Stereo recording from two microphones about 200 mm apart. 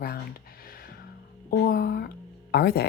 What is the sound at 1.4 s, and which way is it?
Speech, 50° left (ahead or behind).